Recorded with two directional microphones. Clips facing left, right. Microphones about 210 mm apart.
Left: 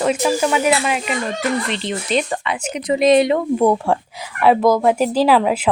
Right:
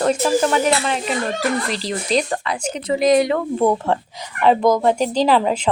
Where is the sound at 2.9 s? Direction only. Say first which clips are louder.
Left 2 dB; 25° left (ahead or behind).